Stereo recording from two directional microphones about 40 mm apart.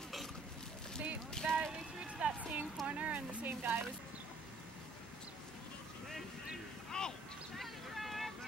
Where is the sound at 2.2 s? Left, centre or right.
Right.